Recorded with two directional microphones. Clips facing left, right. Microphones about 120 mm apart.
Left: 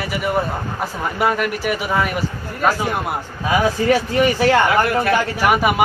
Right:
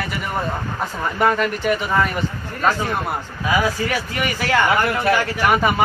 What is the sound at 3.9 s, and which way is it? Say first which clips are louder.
Speech: left 8 dB; 30° left (ahead or behind).